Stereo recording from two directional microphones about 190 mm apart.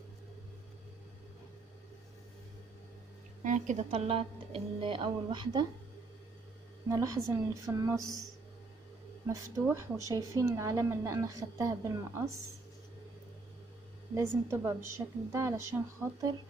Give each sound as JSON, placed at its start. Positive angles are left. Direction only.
{"t": 3.4, "sound": "a woman's voice", "side_deg": -40}
{"t": 6.9, "sound": "speech", "side_deg": -15}
{"t": 9.2, "sound": "speech", "side_deg": -15}
{"t": 14.1, "sound": "speech", "side_deg": -15}